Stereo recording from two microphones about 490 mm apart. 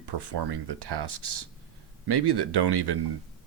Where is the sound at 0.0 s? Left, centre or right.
Right.